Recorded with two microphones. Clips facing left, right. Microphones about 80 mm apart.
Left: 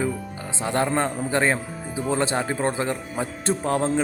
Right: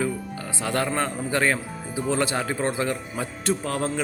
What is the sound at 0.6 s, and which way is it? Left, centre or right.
A man's voice, left.